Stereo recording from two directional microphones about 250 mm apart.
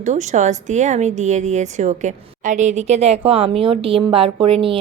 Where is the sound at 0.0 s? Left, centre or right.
Right.